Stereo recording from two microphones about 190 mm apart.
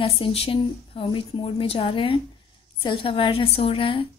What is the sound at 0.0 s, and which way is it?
A woman's voice, 30° left (ahead or behind).